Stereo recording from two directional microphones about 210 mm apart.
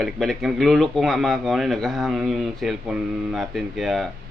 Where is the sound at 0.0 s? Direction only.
Centre (ahead or behind).